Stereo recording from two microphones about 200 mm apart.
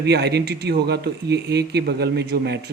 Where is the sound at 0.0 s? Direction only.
55° right (ahead or behind).